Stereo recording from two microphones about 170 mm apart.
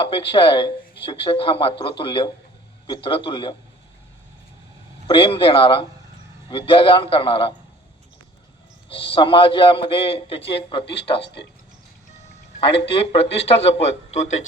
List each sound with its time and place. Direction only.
0.0 s a man's voice: 30° left (ahead or behind)
5.0 s a man's voice: 30° left (ahead or behind)
8.9 s a man's voice: 30° left (ahead or behind)
12.2 s music: 30° left (ahead or behind)
12.9 s a man's voice: 30° left (ahead or behind)